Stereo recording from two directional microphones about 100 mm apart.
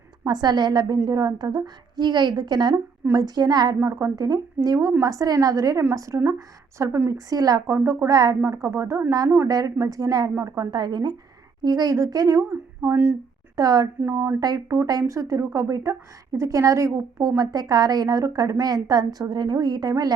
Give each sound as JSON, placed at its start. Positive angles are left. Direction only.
{"t": 0.3, "sound": "a woman's voice", "side_deg": -45}
{"t": 3.8, "sound": "a woman's voice", "side_deg": -30}
{"t": 12.8, "sound": "speech", "side_deg": -20}
{"t": 13.6, "sound": "a woman's voice", "side_deg": -40}
{"t": 14.0, "sound": "speech", "side_deg": -25}
{"t": 14.3, "sound": "a woman's voice", "side_deg": -35}